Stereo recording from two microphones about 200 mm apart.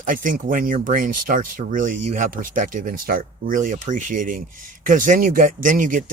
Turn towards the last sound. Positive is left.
turn(degrees=-40)  # may be behind; listen again after turning